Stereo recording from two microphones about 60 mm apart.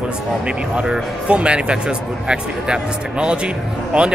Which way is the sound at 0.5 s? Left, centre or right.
Centre.